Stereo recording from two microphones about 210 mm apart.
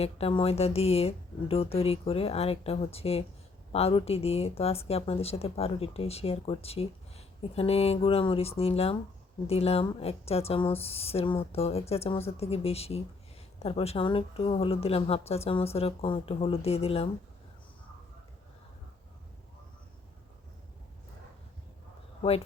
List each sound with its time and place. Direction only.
0.0 s speech: 25° left (ahead or behind)